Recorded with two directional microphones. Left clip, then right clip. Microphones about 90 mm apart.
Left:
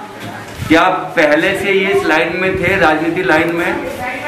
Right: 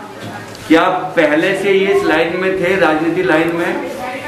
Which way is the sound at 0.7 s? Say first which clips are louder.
Left 1 dB; 15° left (ahead or behind).